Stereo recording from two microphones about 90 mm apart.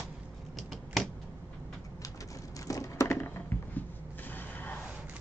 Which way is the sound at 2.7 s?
35° left (ahead or behind).